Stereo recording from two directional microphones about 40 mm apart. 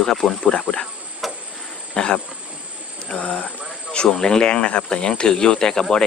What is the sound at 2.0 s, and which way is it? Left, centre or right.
Speech, centre.